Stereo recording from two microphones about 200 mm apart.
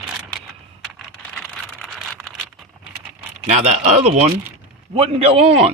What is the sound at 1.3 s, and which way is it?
Typing, 5° left (ahead or behind).